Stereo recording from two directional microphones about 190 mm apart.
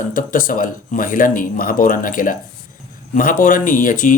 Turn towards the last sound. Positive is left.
turn(degrees=45)  # may be behind; listen again after turning